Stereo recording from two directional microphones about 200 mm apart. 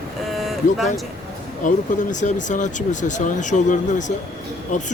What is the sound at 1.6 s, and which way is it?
Speech, 40° left (ahead or behind).